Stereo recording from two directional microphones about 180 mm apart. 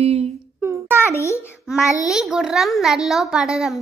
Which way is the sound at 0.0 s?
35° right (ahead or behind).